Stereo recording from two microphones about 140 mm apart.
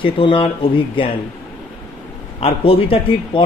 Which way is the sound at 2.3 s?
45° left (ahead or behind).